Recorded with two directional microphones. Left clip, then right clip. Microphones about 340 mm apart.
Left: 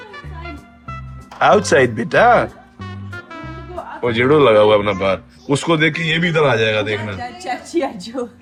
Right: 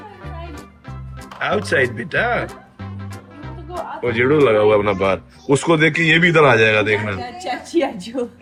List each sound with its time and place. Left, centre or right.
1.5 s speech: centre
4.0 s speech: centre